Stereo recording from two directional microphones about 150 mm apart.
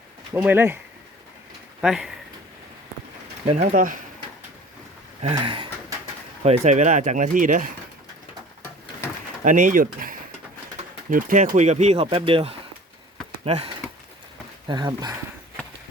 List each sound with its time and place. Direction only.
0.4 s speech: 15° right (ahead or behind)
1.8 s speech: 5° right (ahead or behind)
3.5 s speech: 60° right (ahead or behind)
5.4 s speech: 30° right (ahead or behind)
6.4 s speech: 50° right (ahead or behind)
9.4 s speech: 60° right (ahead or behind); by 13.7 s 40° right (ahead or behind)
14.7 s speech: 30° right (ahead or behind)